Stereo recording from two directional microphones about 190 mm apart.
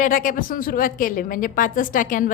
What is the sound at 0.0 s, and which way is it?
A woman's voice, 45° left (ahead or behind).